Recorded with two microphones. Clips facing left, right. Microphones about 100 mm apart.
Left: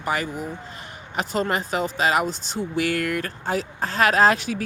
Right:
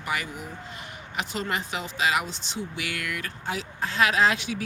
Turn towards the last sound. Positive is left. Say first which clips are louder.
# left 5 dB
turn(degrees=45)  # may be behind; listen again after turning